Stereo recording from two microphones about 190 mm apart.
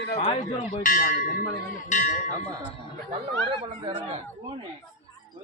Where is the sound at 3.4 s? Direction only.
25° right (ahead or behind).